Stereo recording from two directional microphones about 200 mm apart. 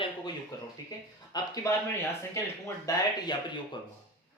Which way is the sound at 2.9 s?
20° left (ahead or behind).